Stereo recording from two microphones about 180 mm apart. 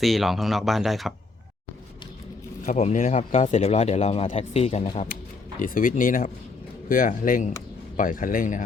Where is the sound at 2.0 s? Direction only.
25° left (ahead or behind).